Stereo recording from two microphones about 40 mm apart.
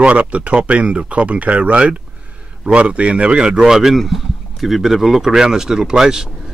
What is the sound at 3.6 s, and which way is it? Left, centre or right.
Speech, centre.